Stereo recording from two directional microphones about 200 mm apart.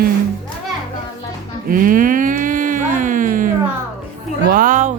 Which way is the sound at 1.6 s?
45° right (ahead or behind).